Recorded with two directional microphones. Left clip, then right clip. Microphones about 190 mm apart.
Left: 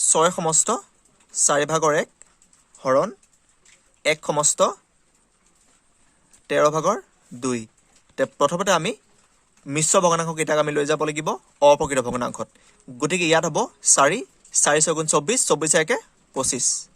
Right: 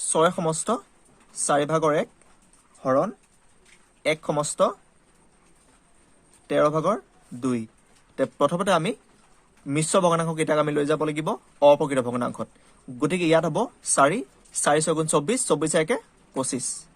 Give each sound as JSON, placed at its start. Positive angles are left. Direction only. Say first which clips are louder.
{"t": 0.1, "sound": "speech", "louder": "left 1 dB", "side_deg": 35}
{"t": 4.0, "sound": "speech", "louder": "left 3 dB", "side_deg": 35}
{"t": 6.5, "sound": "speech", "louder": "left 2 dB", "side_deg": 40}